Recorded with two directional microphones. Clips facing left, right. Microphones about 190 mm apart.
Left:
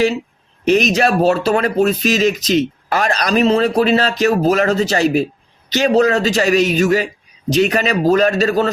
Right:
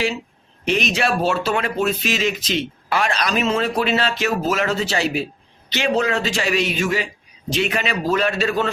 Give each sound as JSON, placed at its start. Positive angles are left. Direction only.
{"t": 0.6, "sound": "speech", "side_deg": 40}